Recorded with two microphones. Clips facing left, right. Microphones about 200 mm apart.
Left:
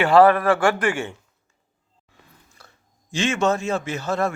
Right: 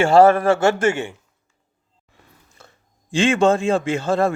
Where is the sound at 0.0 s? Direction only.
25° right (ahead or behind).